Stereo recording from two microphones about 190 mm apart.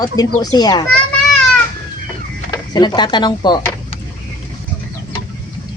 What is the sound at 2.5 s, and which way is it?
Speech, 20° left (ahead or behind).